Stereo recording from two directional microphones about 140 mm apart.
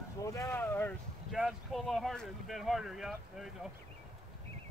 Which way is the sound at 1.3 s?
Centre (ahead or behind).